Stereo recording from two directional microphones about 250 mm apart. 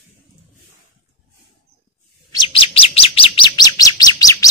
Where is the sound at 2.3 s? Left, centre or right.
Left.